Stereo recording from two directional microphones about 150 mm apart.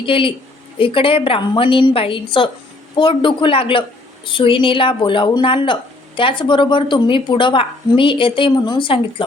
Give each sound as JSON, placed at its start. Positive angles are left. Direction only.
{"t": 0.0, "sound": "a woman's voice", "side_deg": 35}